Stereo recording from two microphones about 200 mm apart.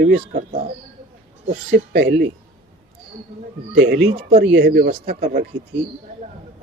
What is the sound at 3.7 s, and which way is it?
Speech, 60° right (ahead or behind).